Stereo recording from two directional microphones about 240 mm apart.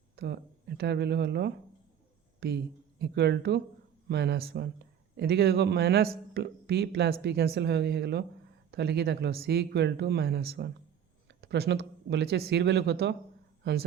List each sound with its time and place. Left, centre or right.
0.2 s speech: right
3.0 s speech: right